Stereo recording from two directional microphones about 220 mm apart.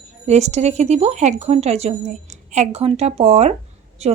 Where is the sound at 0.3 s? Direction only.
30° right (ahead or behind).